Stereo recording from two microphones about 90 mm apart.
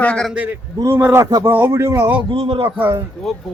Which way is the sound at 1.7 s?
30° right (ahead or behind).